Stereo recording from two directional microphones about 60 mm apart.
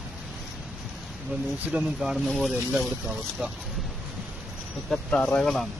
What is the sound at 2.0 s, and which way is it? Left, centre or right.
Speech, centre.